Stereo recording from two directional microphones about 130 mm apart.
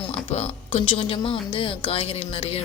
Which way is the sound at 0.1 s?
50° left (ahead or behind).